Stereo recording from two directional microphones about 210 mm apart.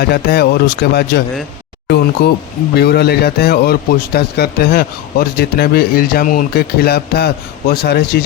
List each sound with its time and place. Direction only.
0.0 s a man's voice: 50° left (ahead or behind)
2.2 s a man's voice: 50° left (ahead or behind)